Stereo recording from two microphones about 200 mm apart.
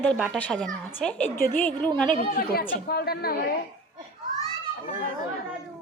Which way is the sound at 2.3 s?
50° left (ahead or behind).